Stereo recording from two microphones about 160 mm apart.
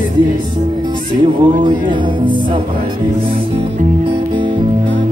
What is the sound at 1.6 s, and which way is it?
Music, 30° right (ahead or behind).